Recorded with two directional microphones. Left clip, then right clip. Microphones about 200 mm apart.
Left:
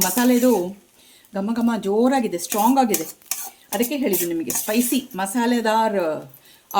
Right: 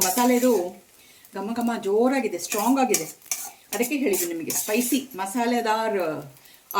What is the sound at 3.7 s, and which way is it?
Speech, 55° left (ahead or behind).